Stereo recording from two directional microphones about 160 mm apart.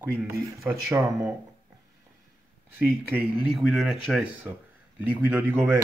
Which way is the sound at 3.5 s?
Centre (ahead or behind).